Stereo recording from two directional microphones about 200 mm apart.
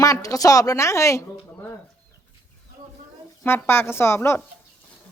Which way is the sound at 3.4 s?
10° left (ahead or behind).